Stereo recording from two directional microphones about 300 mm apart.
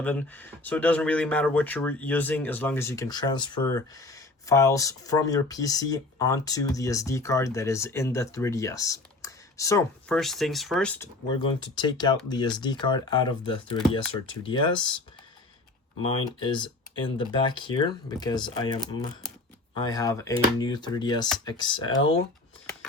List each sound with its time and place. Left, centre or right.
0.0 s speech: centre
16.0 s speech: centre